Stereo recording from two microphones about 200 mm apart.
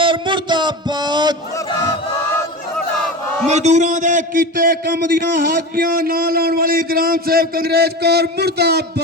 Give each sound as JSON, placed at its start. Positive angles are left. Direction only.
{"t": 0.0, "sound": "a sound", "side_deg": -25}
{"t": 2.7, "sound": "battle cry", "side_deg": 5}
{"t": 3.5, "sound": "a man's voice", "side_deg": -35}